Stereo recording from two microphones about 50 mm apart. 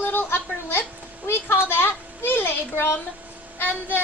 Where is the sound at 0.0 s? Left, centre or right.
Left.